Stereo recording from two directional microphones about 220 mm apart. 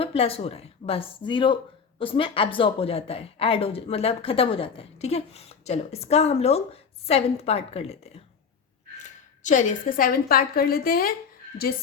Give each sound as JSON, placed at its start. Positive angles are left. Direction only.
{"t": 0.0, "sound": "a woman's voice", "side_deg": 25}